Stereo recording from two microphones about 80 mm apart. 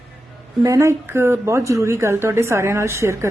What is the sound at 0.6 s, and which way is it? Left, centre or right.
Speech, right.